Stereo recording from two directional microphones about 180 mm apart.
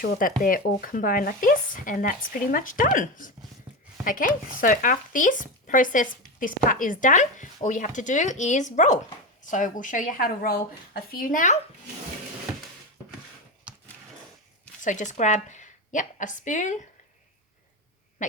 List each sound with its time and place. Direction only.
0.0 s speech: 50° left (ahead or behind)
14.8 s a woman's voice: 45° left (ahead or behind)
18.2 s owl: 45° left (ahead or behind)